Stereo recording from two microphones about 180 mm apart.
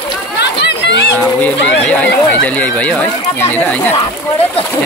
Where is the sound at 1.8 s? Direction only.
5° left (ahead or behind).